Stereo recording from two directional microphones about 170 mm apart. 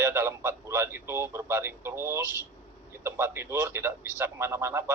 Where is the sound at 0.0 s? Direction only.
15° right (ahead or behind).